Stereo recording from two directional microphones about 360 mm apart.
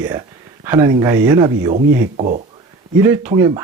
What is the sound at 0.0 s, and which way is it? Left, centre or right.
Speech, centre.